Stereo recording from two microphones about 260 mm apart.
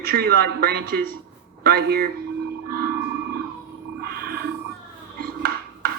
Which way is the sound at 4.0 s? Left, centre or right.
Right.